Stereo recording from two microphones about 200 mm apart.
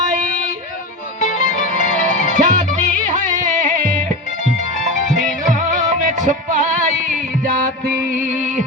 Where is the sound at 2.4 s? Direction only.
40° right (ahead or behind).